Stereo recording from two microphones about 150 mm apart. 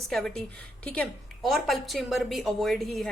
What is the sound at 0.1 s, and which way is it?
A woman's voice, 5° left (ahead or behind).